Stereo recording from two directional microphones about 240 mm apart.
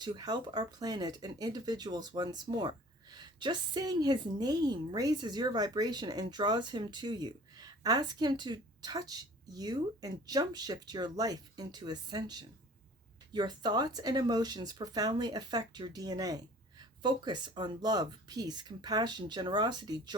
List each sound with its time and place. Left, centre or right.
0.0 s speech: centre